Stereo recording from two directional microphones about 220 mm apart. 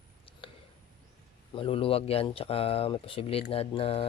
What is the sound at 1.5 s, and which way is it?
Speech, 25° left (ahead or behind).